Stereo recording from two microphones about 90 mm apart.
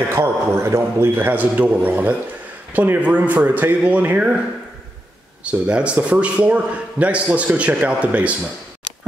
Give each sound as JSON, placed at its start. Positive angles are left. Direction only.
{"t": 0.1, "sound": "a man's voice", "side_deg": -30}
{"t": 5.4, "sound": "a man's voice", "side_deg": -10}